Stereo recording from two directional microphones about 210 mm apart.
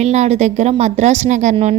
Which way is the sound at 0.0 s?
30° right (ahead or behind).